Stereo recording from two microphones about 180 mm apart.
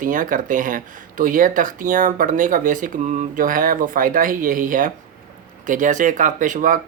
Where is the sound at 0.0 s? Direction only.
50° right (ahead or behind).